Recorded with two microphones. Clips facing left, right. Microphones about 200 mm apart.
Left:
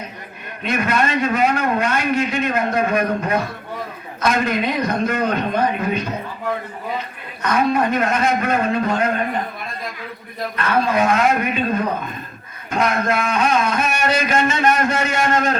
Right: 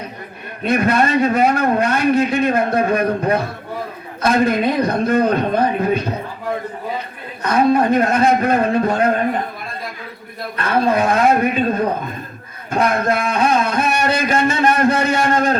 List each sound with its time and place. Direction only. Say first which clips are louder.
0.7 s a man's voice: right 4 dB; 35° right (ahead or behind)
7.4 s a man's voice: right 4 dB; 35° right (ahead or behind)
10.6 s a man's voice: right 2 dB; 35° right (ahead or behind)